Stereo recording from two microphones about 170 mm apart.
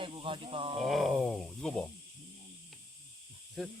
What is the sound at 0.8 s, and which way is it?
Speech, centre (ahead or behind).